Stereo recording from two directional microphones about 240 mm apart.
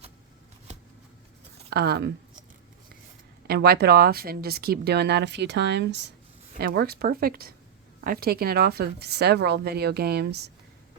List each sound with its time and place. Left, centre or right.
1.7 s speech: right
3.4 s speech: right